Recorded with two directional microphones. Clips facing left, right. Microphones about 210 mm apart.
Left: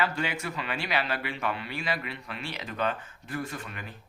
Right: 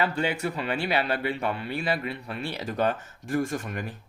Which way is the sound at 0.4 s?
30° right (ahead or behind).